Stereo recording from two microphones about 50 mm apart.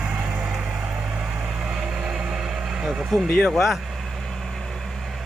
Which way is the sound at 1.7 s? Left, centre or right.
Centre.